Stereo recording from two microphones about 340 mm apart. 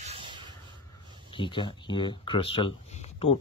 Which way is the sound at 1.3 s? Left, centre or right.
Centre.